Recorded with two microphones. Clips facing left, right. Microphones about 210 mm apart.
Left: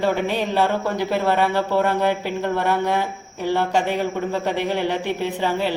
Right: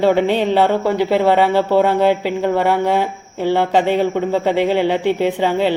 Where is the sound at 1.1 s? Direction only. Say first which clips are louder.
Right 6 dB; 80° right.